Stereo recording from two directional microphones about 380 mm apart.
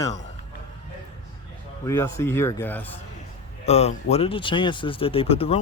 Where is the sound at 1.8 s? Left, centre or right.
Centre.